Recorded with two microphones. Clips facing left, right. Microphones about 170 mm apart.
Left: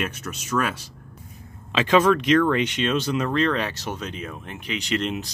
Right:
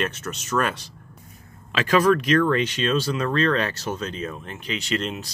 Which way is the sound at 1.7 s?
25° left (ahead or behind).